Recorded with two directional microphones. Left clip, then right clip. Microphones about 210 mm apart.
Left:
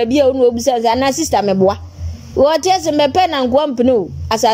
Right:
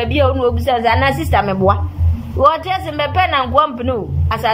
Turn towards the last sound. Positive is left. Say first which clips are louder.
# left 6 dB
turn(degrees=40)  # may be behind; listen again after turning